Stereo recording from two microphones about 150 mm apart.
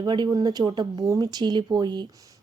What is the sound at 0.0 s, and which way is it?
A woman's voice, 30° right (ahead or behind).